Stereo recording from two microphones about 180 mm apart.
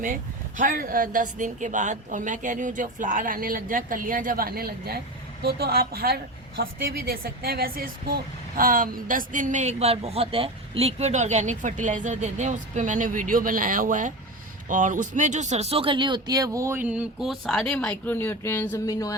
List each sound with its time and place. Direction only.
0.0 s a woman's voice: 45° right (ahead or behind); by 19.1 s 20° left (ahead or behind)